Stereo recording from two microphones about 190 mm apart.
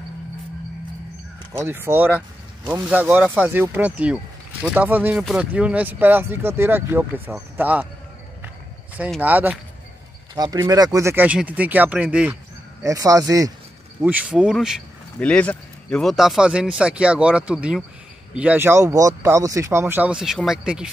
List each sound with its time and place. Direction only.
1.6 s speech: 10° right (ahead or behind)
8.9 s speech: 5° right (ahead or behind)
10.3 s speech: 20° right (ahead or behind)
12.8 s speech: 15° right (ahead or behind)
14.0 s speech: 5° right (ahead or behind)